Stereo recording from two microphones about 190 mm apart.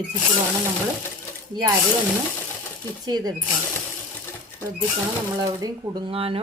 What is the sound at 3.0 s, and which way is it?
Speech, 20° right (ahead or behind).